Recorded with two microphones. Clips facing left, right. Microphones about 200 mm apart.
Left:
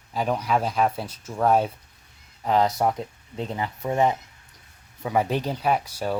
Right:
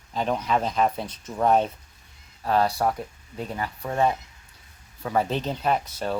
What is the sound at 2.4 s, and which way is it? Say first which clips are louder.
Speech: left 1 dB; 20° left (ahead or behind).